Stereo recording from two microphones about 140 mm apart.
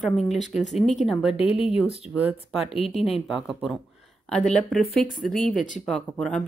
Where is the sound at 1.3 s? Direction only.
45° left (ahead or behind).